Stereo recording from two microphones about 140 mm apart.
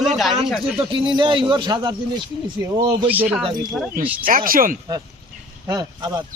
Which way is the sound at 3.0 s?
10° right (ahead or behind).